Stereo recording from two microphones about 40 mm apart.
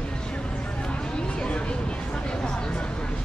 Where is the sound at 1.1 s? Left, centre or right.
Left.